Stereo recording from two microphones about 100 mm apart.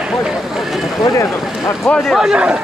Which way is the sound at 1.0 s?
30° left (ahead or behind).